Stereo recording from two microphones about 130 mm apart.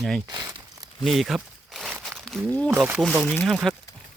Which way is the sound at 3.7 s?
Centre (ahead or behind).